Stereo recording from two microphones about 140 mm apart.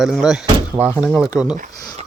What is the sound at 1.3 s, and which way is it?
Speech, centre (ahead or behind).